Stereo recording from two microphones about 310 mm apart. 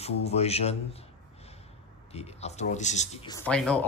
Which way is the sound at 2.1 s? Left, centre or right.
Left.